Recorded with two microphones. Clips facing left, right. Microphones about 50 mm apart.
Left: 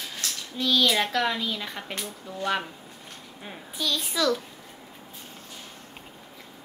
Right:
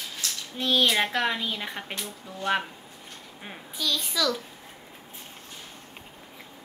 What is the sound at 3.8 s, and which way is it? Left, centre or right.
Speech, centre.